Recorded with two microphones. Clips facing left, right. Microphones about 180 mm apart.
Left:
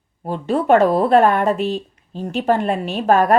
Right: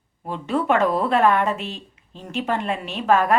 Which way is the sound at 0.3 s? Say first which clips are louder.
Left 6 dB; 35° left (ahead or behind).